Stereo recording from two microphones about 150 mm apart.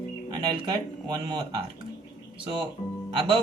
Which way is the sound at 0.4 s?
30° right (ahead or behind).